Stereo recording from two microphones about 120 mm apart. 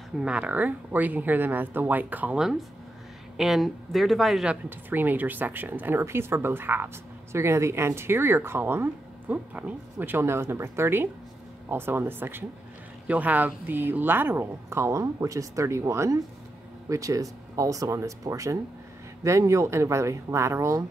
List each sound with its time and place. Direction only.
0.2 s speech: 10° right (ahead or behind)
4.6 s speech: 15° right (ahead or behind)